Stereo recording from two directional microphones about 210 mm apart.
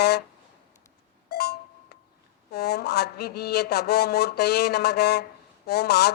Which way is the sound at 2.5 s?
50° left (ahead or behind).